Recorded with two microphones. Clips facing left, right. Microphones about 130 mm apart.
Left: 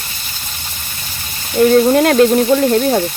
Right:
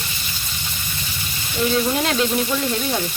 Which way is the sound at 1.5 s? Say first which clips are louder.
Left 11 dB; 50° left (ahead or behind).